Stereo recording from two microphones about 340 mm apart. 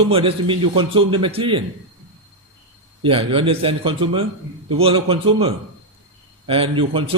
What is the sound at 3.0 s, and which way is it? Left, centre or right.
A man's voice, centre.